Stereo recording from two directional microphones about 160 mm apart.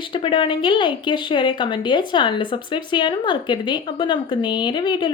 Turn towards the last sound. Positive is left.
turn(degrees=30)  # may be behind; listen again after turning